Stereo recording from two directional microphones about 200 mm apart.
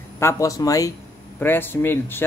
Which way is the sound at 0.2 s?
15° left (ahead or behind).